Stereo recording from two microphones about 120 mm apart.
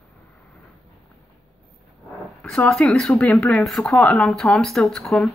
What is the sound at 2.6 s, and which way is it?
Speech, 5° left (ahead or behind).